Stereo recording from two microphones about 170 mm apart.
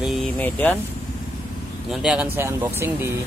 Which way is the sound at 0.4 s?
10° left (ahead or behind).